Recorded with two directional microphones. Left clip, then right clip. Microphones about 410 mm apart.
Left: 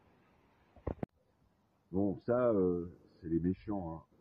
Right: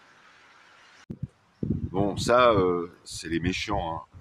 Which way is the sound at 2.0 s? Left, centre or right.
Left.